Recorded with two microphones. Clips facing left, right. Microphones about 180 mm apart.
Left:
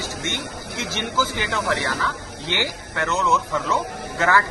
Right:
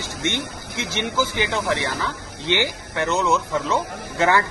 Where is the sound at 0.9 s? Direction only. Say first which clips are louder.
Right 2 dB; 20° right (ahead or behind).